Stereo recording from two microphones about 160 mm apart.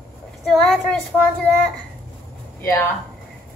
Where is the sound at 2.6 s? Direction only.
15° left (ahead or behind).